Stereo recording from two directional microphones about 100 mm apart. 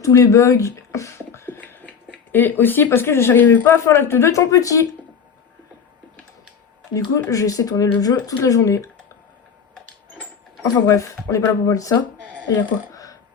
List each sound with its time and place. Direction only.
0.0 s a sound: 30° left (ahead or behind)
2.3 s speech: 20° left (ahead or behind)
7.3 s speech: 35° left (ahead or behind)
10.6 s speech: 30° left (ahead or behind)